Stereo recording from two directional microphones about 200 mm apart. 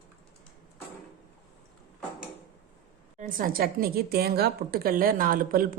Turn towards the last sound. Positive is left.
turn(degrees=-45)  # may be behind; listen again after turning